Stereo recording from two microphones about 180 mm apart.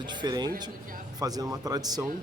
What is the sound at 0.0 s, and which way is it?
Speech, 25° right (ahead or behind).